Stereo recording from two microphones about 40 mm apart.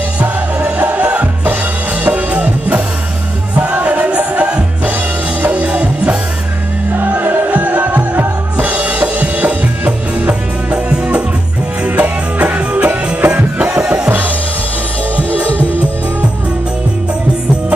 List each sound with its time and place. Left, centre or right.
0.2 s music: right
1.1 s music: right
2.0 s music: right
3.8 s music: right
4.3 s music: right
5.4 s music: right
7.2 s music: right
8.7 s music: right
10.9 s music: right
13.2 s music: right
13.7 s music: right
15.1 s music: right